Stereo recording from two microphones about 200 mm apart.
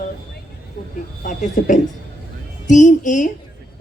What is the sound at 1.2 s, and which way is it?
A woman's voice, 40° left (ahead or behind).